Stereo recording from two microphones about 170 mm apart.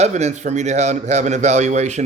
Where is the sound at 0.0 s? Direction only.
40° right (ahead or behind).